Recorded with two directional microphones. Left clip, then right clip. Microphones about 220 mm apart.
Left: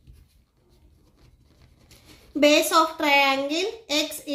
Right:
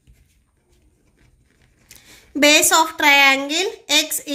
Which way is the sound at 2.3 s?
50° right (ahead or behind).